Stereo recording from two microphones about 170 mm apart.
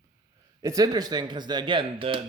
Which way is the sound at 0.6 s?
20° right (ahead or behind).